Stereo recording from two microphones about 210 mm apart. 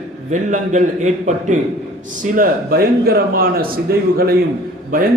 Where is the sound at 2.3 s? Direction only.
45° right (ahead or behind).